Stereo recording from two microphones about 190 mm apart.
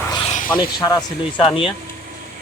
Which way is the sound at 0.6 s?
20° left (ahead or behind).